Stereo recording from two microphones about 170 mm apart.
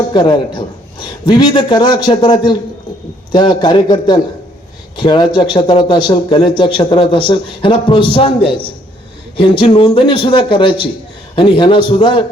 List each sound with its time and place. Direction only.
0.1 s speech: 25° left (ahead or behind)